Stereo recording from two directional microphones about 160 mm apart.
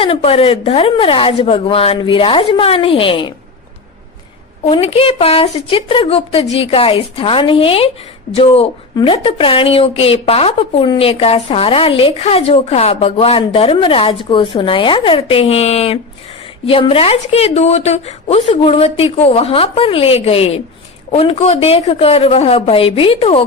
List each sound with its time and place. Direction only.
0.0 s a woman's voice: 35° left (ahead or behind)
4.7 s a woman's voice: 35° left (ahead or behind)